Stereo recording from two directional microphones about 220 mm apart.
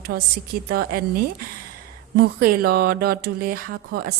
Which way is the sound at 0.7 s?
40° right (ahead or behind).